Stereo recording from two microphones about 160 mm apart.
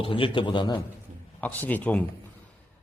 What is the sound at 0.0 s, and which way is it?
Speech, 35° left (ahead or behind).